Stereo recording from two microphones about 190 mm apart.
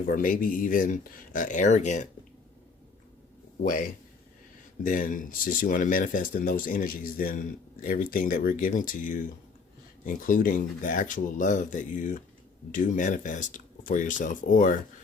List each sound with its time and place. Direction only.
0.0 s speech: 45° left (ahead or behind)
3.6 s speech: 45° left (ahead or behind)